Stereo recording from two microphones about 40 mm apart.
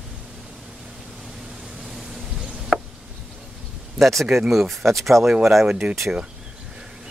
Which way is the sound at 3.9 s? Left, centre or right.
Centre.